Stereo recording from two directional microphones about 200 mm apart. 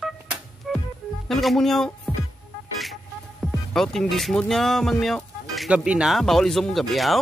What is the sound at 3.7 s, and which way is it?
Speech, centre (ahead or behind).